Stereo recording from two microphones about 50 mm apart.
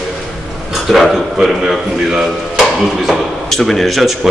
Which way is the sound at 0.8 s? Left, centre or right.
Centre.